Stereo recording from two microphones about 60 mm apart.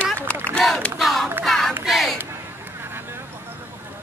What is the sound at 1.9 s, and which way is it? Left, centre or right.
Crowd, centre.